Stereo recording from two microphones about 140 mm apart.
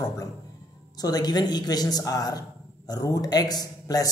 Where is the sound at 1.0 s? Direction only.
30° left (ahead or behind).